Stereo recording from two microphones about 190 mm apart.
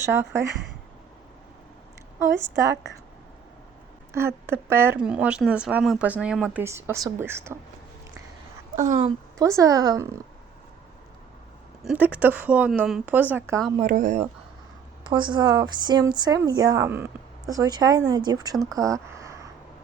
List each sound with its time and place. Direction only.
0.0 s speech: 10° right (ahead or behind)
2.2 s speech: 15° right (ahead or behind)
4.1 s speech: 15° right (ahead or behind)
8.7 s speech: 40° right (ahead or behind)
9.4 s speech: 15° right (ahead or behind)
11.8 s speech: 5° right (ahead or behind)
13.8 s speech: 45° right (ahead or behind)
15.0 s speech: 25° right (ahead or behind)
18.8 s a sound: 15° right (ahead or behind)